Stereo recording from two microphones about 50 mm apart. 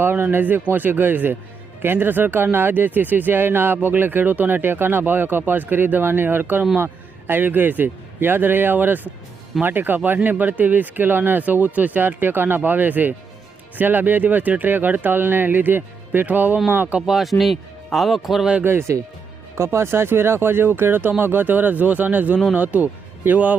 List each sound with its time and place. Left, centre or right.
0.0 s a man's voice: right
17.1 s a man's voice: centre
18.6 s speech: right